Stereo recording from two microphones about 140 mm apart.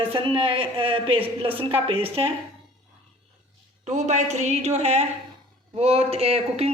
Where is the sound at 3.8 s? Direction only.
60° right (ahead or behind).